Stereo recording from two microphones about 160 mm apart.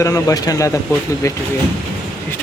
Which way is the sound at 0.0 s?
20° left (ahead or behind).